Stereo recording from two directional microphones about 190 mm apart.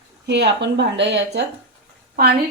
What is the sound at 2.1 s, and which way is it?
Speech, 55° right (ahead or behind).